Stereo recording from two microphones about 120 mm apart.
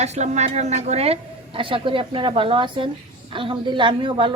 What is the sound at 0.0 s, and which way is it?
A woman's voice, 70° right (ahead or behind).